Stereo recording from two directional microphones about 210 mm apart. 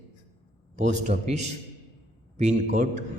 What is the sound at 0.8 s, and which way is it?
Speech, 35° right (ahead or behind).